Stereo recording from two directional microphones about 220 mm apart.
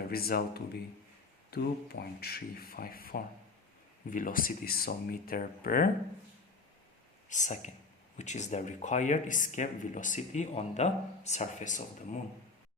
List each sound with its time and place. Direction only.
0.1 s speech: 45° left (ahead or behind)
7.3 s speech: 35° left (ahead or behind)